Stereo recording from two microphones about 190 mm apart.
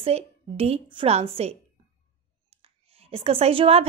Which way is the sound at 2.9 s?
30° right (ahead or behind).